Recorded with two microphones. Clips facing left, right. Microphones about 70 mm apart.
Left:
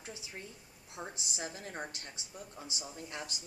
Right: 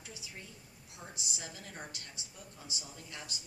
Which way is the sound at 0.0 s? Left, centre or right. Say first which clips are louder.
Left 3 dB; left.